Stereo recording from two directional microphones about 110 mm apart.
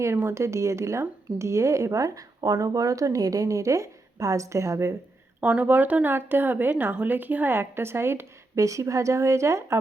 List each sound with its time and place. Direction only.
0.0 s a woman's voice: 25° right (ahead or behind)
5.4 s a woman's voice: 15° right (ahead or behind)